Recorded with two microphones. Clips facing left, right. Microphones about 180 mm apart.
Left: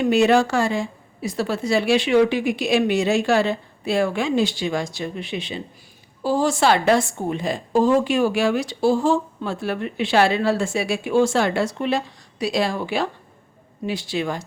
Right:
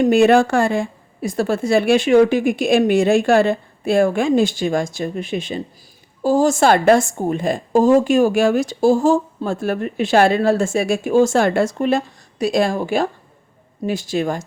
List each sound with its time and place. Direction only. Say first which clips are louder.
0.0 s a woman's voice: right 4 dB; 50° right (ahead or behind)